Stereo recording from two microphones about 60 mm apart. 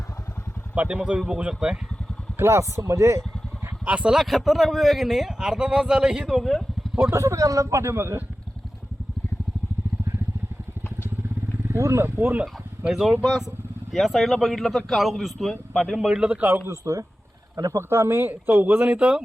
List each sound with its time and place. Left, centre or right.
0.8 s a man's voice: right
2.4 s speech: right
3.8 s speech: right
4.1 s speech: centre
6.2 s speech: centre
7.1 s speech: right
11.7 s speech: right
12.0 s speech: right
12.9 s a man's voice: centre
16.0 s a man's voice: centre
16.4 s speech: right
16.6 s speech: right
17.7 s speech: right; by 19.2 s centre